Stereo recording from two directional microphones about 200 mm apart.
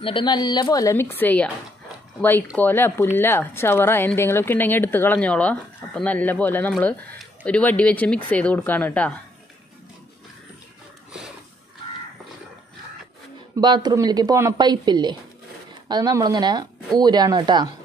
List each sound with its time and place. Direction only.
0.0 s a woman's voice: 25° left (ahead or behind); by 9.1 s 5° left (ahead or behind)
13.6 s speech: 20° right (ahead or behind)